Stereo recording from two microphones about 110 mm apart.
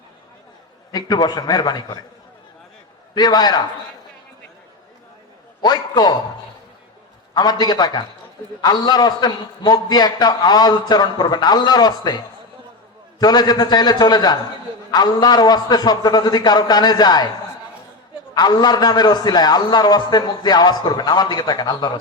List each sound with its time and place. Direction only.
0.9 s a man's voice: 40° left (ahead or behind)
3.2 s a man's voice: 40° left (ahead or behind)
5.6 s a man's voice: 40° left (ahead or behind)
7.3 s a man's voice: 40° left (ahead or behind)
18.3 s a man's voice: 40° left (ahead or behind)